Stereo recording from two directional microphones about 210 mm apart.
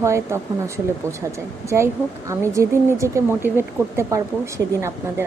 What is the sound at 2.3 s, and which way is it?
Speech, 15° right (ahead or behind).